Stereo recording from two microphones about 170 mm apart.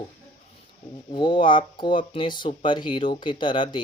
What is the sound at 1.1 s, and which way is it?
Speech, 30° left (ahead or behind).